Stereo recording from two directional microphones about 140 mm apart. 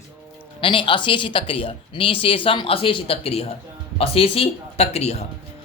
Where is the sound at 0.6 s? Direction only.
35° left (ahead or behind).